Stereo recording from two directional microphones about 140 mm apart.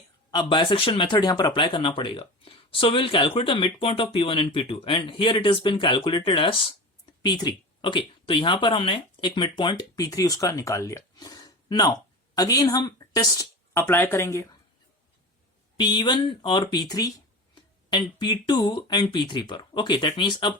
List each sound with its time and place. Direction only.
0.3 s speech: 35° left (ahead or behind); by 14.4 s 20° left (ahead or behind)
15.8 s speech: 30° left (ahead or behind)